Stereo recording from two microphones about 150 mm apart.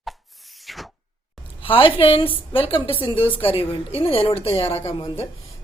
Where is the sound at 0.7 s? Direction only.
Centre (ahead or behind).